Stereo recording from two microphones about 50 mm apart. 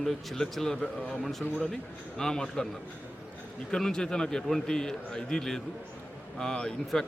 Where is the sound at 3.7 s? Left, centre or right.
Centre.